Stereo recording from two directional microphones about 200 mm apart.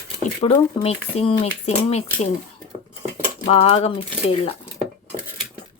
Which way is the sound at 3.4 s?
30° left (ahead or behind).